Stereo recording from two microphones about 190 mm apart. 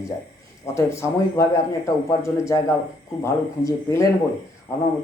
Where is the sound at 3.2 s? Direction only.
15° left (ahead or behind).